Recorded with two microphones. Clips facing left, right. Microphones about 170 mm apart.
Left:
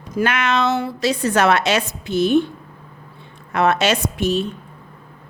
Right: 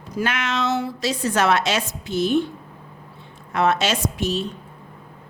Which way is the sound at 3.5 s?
60° left (ahead or behind).